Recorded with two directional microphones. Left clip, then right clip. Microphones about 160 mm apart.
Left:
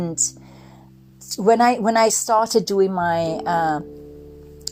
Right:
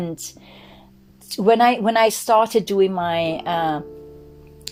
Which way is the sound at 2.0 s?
15° left (ahead or behind).